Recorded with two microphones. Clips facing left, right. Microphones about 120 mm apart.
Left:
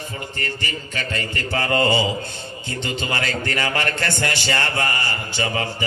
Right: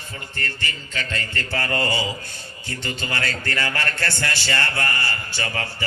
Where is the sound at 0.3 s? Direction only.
15° left (ahead or behind).